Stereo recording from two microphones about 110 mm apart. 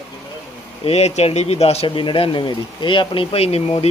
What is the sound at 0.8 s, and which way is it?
Speech, 75° left (ahead or behind).